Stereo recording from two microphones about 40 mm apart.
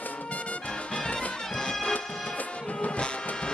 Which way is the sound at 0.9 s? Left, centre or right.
Left.